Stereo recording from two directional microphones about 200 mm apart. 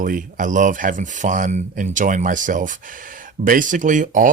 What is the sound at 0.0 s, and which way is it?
Speech, 40° right (ahead or behind).